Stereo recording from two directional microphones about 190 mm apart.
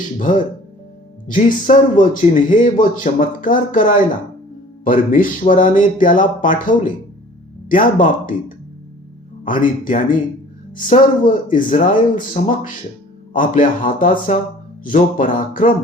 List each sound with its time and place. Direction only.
1.3 s speech: 45° left (ahead or behind)